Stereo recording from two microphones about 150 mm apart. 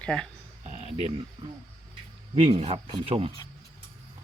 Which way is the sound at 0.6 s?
50° right (ahead or behind).